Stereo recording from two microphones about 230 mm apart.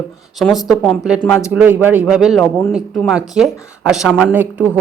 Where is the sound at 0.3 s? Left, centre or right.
Centre.